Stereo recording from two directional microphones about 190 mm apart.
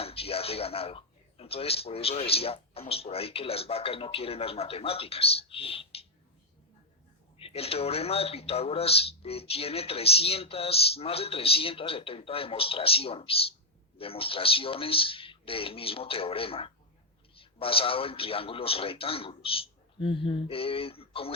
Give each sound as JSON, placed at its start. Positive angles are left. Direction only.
{"t": 0.0, "sound": "speech", "side_deg": 30}
{"t": 7.3, "sound": "a man's voice", "side_deg": 30}